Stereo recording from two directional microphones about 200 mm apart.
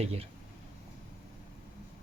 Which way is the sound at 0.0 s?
30° right (ahead or behind).